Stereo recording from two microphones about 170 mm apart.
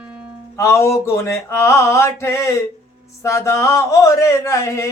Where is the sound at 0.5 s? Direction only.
15° left (ahead or behind).